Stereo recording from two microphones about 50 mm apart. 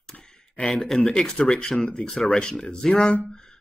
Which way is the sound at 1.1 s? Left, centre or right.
Centre.